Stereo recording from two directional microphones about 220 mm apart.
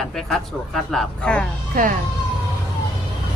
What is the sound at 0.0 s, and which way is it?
A woman's voice, centre (ahead or behind).